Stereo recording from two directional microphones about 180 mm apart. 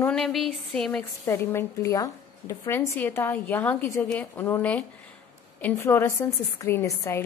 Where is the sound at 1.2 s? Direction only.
15° left (ahead or behind).